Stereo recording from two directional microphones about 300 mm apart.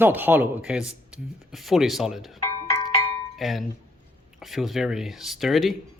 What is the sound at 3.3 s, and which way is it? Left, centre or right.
Speech, centre.